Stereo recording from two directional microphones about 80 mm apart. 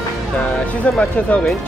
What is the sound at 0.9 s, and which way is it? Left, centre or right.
Speech, centre.